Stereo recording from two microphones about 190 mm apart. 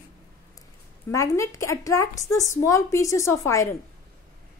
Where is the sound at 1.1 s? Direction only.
15° left (ahead or behind).